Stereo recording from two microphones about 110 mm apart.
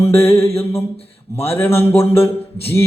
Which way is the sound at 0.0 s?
25° left (ahead or behind).